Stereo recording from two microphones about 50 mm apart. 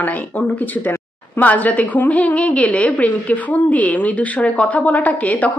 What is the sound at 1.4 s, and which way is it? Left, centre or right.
A woman's voice, left.